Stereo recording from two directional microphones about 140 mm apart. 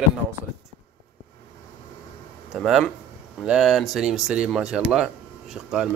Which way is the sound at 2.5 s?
5° right (ahead or behind).